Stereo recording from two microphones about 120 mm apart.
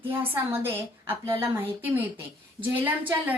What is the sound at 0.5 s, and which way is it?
A woman's voice, 20° right (ahead or behind).